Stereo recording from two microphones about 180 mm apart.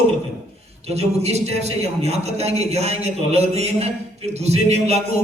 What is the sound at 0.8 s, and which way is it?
A man's voice, 35° right (ahead or behind).